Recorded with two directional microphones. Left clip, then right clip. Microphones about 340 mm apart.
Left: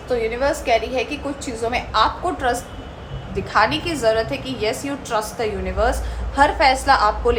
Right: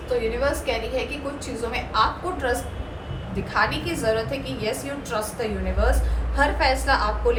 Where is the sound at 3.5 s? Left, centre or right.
Centre.